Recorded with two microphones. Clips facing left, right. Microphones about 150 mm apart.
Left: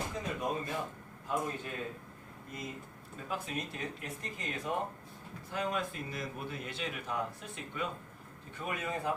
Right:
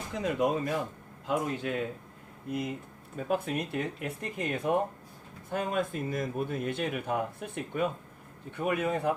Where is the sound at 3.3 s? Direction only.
60° right (ahead or behind).